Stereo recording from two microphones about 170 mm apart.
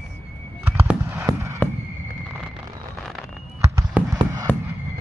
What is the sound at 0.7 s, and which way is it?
Fireworks, 10° right (ahead or behind).